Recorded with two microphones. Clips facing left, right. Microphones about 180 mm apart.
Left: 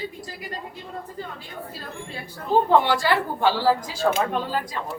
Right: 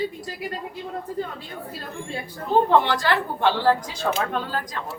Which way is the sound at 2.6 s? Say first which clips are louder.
Left 1 dB; 10° left (ahead or behind).